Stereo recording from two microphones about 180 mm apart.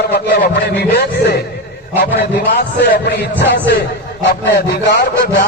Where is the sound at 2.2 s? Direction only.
65° left (ahead or behind).